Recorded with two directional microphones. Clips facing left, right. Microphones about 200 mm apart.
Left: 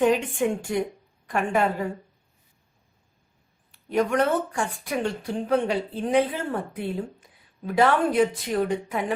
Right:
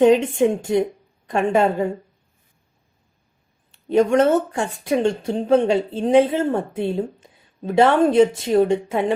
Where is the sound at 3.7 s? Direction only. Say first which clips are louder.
Right 7 dB; 25° right (ahead or behind).